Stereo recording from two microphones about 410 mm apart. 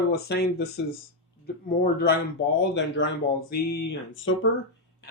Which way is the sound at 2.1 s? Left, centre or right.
Left.